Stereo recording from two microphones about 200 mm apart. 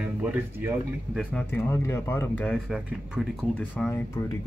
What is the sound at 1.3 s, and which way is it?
Speech, 10° left (ahead or behind).